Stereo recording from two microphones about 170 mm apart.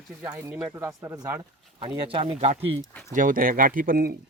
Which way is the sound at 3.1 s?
50° right (ahead or behind).